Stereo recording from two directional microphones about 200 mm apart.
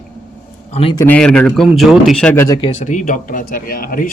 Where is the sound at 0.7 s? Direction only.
30° left (ahead or behind).